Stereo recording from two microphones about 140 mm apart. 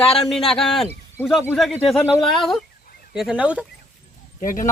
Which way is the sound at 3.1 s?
5° right (ahead or behind).